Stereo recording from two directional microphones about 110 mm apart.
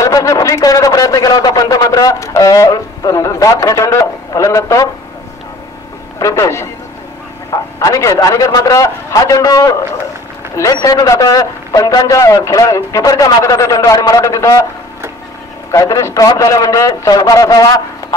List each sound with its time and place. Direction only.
0.0 s a sound: 30° left (ahead or behind)
6.1 s a man's voice: 30° left (ahead or behind)
15.7 s a man's voice: 30° left (ahead or behind)